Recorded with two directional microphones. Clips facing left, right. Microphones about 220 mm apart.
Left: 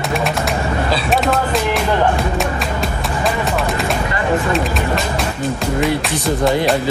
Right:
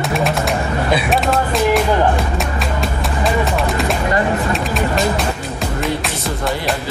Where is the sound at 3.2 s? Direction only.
Centre (ahead or behind).